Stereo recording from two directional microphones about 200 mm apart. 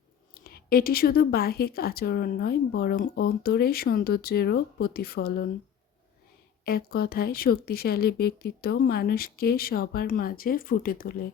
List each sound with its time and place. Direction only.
0.4 s a woman's voice: 50° left (ahead or behind)
6.7 s a woman's voice: 50° left (ahead or behind)